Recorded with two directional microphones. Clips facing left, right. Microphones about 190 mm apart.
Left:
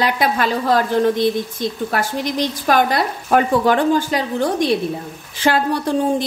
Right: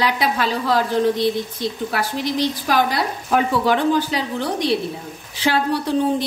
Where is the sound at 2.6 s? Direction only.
55° left (ahead or behind).